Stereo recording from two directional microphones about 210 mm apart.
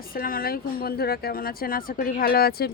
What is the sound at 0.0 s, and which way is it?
Speech, 45° left (ahead or behind).